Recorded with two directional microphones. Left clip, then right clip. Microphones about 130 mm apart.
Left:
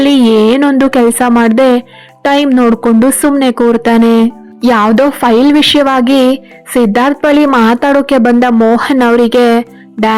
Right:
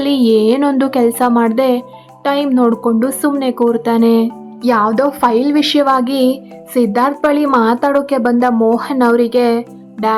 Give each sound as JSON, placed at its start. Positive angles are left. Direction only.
{"t": 0.0, "sound": "a woman's voice", "side_deg": 30}